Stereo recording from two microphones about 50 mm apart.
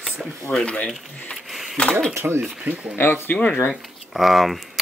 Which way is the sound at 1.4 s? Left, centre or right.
Centre.